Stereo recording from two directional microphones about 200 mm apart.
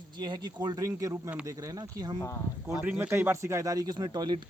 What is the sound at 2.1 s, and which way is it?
Speech, 15° left (ahead or behind).